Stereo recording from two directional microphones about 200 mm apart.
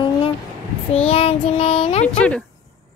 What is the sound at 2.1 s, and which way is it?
Speech, 5° left (ahead or behind).